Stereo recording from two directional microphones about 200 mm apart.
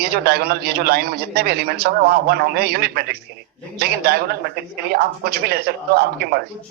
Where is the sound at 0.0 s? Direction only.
50° right (ahead or behind).